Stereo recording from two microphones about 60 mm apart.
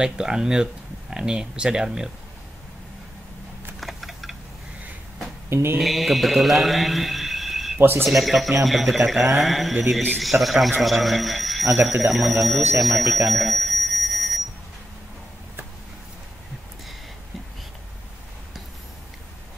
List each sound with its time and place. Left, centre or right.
0.0 s speech: centre
3.8 s typing: centre
5.5 s speech: right
5.8 s a man's voice: centre
12.8 s alarm: centre